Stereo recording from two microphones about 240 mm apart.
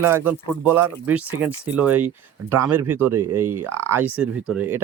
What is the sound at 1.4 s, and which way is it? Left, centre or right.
Speech, centre.